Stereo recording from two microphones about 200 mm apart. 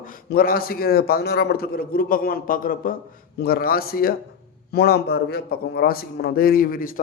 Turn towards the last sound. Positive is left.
turn(degrees=45)  # may be behind; listen again after turning